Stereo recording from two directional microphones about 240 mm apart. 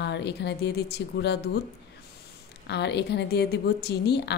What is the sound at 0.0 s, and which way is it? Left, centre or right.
A woman's voice, left.